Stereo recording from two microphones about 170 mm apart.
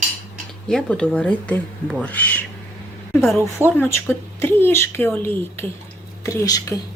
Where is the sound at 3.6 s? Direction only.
15° left (ahead or behind).